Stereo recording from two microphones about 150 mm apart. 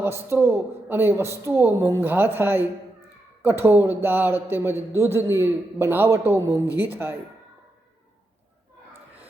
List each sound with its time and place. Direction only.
0.0 s a man's voice: 15° right (ahead or behind)